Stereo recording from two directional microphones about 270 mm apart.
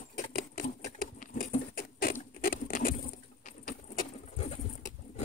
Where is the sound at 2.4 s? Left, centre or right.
Left.